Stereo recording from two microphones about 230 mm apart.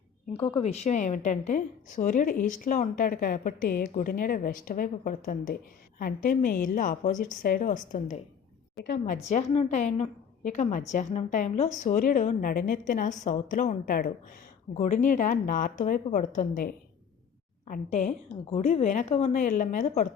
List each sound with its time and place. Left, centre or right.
0.4 s a woman's voice: left